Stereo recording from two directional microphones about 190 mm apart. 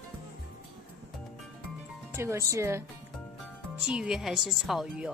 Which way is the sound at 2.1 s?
15° right (ahead or behind).